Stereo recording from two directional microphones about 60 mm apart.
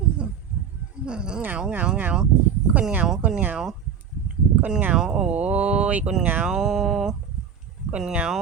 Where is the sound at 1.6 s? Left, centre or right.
Centre.